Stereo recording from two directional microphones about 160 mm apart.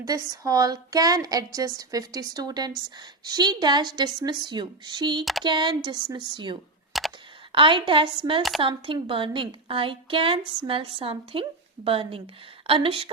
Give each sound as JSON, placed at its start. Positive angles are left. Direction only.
{"t": 0.0, "sound": "a woman's voice", "side_deg": -20}
{"t": 6.9, "sound": "computer keyboard", "side_deg": 0}
{"t": 7.5, "sound": "a woman's voice", "side_deg": -30}